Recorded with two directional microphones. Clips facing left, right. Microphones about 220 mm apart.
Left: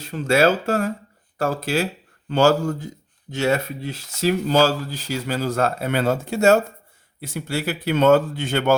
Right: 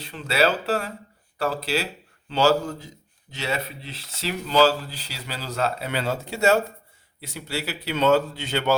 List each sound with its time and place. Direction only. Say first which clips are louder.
0.0 s speech: left 5 dB; 45° left (ahead or behind)